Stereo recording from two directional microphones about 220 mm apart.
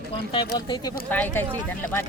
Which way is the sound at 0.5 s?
20° left (ahead or behind).